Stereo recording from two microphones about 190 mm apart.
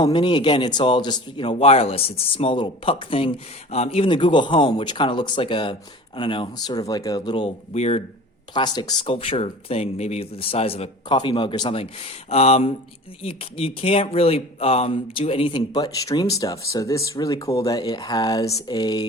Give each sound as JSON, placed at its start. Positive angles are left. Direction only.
{"t": 0.0, "sound": "speech", "side_deg": 25}
{"t": 8.5, "sound": "speech", "side_deg": 20}